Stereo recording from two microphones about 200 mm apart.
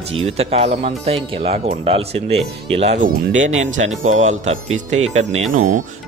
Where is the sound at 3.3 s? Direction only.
70° right (ahead or behind).